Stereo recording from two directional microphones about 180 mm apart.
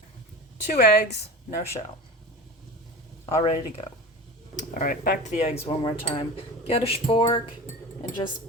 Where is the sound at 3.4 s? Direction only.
40° left (ahead or behind).